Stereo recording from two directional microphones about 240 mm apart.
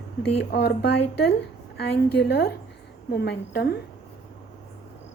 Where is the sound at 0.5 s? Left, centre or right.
Left.